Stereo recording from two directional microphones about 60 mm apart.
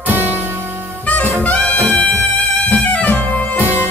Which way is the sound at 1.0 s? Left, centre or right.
Left.